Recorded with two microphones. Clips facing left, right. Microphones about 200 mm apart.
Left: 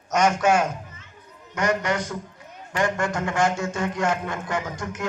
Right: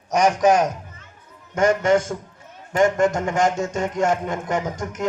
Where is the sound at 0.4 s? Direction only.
40° right (ahead or behind).